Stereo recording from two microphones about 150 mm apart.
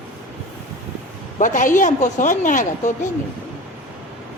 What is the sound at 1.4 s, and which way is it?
Speech, 60° left (ahead or behind).